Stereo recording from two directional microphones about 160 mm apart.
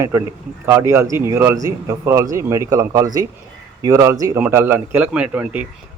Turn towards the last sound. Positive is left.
turn(degrees=-10)  # may be behind; listen again after turning